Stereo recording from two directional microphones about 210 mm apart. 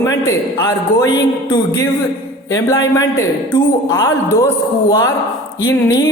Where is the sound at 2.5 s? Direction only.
15° left (ahead or behind).